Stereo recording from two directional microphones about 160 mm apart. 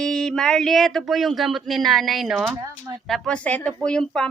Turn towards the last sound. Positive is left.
turn(degrees=5)  # may be behind; listen again after turning